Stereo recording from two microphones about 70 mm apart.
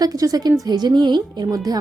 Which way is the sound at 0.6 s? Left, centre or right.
Right.